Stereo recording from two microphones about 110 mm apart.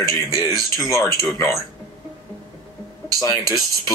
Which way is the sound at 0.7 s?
30° left (ahead or behind).